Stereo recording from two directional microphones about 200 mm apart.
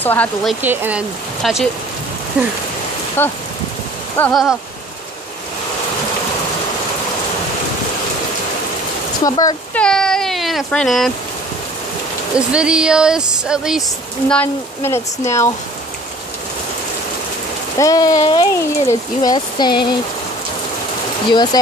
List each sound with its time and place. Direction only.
0.0 s speech: 10° left (ahead or behind)
0.6 s speech: 10° right (ahead or behind)
3.2 s speech: 10° left (ahead or behind)
4.2 s speech: centre (ahead or behind)
9.2 s speech: 20° left (ahead or behind)
9.8 s speech: 5° left (ahead or behind)
12.4 s speech: 5° right (ahead or behind)
14.3 s speech: 10° left (ahead or behind)
17.7 s speech: 20° left (ahead or behind)